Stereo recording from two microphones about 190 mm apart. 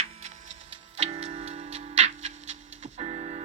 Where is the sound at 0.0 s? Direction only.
35° right (ahead or behind).